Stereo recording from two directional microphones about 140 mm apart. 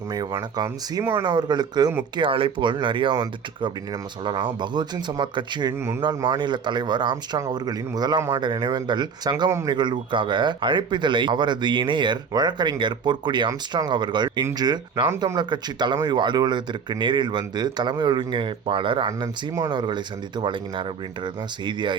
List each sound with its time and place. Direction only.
0.1 s speech: 30° right (ahead or behind)